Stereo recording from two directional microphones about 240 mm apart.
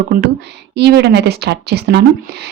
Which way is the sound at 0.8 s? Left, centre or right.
Right.